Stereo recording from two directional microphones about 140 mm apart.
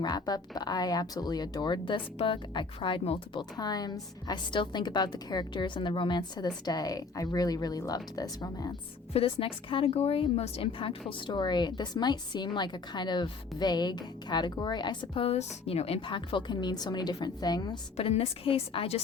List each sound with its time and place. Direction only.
0.0 s speech: 30° left (ahead or behind)
3.6 s a woman's voice: 30° left (ahead or behind)
9.1 s a woman's voice: 40° left (ahead or behind)
17.9 s a woman's voice: 50° left (ahead or behind)